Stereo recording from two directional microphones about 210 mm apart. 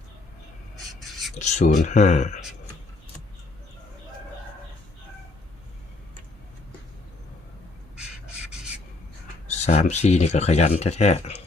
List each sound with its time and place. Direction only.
1.4 s speech: 35° left (ahead or behind)
9.5 s speech: 35° left (ahead or behind)